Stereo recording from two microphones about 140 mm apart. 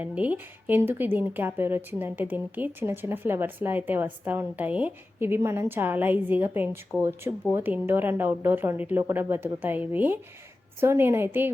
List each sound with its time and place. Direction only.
0.0 s speech: 10° right (ahead or behind)